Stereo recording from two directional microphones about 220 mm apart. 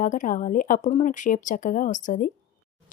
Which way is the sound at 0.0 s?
35° left (ahead or behind).